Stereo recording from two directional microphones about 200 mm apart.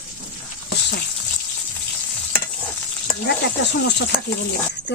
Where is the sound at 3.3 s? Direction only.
60° left (ahead or behind).